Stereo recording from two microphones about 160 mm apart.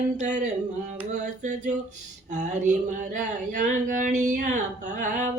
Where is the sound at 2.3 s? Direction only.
50° right (ahead or behind).